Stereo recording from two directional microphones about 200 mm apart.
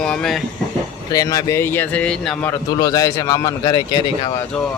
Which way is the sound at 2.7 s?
20° left (ahead or behind).